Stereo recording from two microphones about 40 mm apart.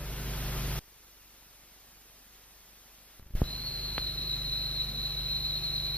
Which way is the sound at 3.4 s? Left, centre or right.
Left.